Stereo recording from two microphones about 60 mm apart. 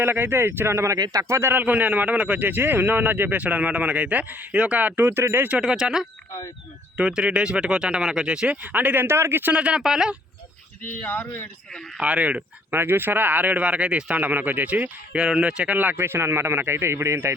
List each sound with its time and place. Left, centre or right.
0.0 s speech: right
0.9 s speech: right
1.3 s speech: right
1.5 s a man's voice: right
5.0 s speech: right
5.5 s speech: centre
7.2 s speech: centre
8.6 s a man's voice: right
9.0 s speech: right
9.5 s a man's voice: centre
10.8 s speech: left
11.9 s speech: centre
12.7 s a man's voice: right; by 15.8 s centre
15.8 s speech: right